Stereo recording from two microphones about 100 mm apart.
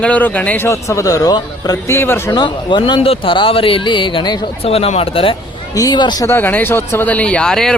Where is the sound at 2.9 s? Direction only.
85° left; by 4.5 s 50° left (ahead or behind).